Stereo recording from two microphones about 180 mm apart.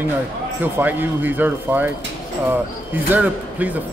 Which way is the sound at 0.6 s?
10° right (ahead or behind).